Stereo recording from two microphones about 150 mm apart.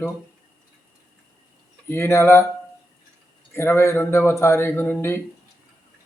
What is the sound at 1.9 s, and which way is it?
Speech, 15° left (ahead or behind).